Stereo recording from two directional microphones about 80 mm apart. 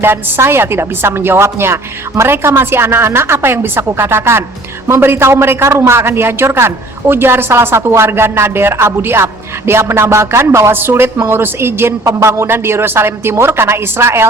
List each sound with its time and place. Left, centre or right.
0.0 s a man's voice: right